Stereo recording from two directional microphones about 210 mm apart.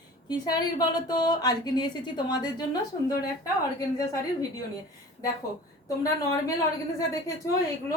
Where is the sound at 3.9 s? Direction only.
15° left (ahead or behind).